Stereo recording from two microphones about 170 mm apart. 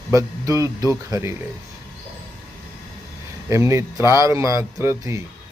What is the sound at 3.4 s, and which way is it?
A man's voice, 15° right (ahead or behind).